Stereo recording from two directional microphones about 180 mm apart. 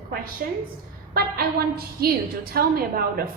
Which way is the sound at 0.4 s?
55° right (ahead or behind).